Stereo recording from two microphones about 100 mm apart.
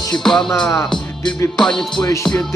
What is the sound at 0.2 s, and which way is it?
Music, 5° left (ahead or behind).